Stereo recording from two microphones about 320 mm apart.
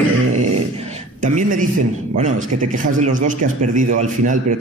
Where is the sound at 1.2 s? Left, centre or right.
Right.